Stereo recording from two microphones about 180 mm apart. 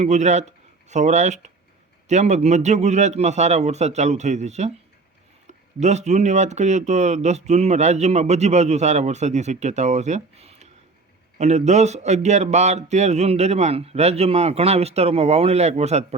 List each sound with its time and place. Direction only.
0.0 s speech: 40° right (ahead or behind)